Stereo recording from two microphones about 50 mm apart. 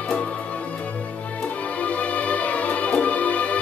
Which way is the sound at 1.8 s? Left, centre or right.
Left.